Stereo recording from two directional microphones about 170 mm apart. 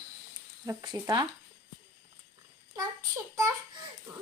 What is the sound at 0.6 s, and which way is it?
Speech, 20° right (ahead or behind).